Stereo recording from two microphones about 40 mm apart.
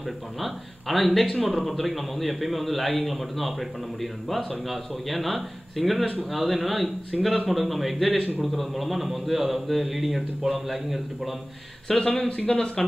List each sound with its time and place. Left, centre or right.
0.4 s speech: centre
12.0 s speech: left